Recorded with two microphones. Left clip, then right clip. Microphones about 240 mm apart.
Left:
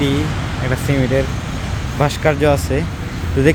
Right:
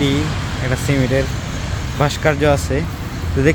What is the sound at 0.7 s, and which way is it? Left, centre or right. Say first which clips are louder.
Speech: even; centre.